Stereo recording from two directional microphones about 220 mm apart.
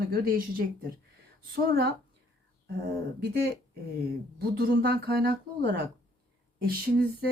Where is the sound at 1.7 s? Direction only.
50° right (ahead or behind).